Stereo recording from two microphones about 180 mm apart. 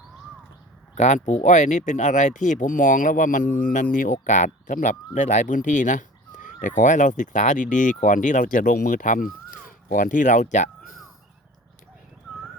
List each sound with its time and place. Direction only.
0.9 s speech: 40° left (ahead or behind)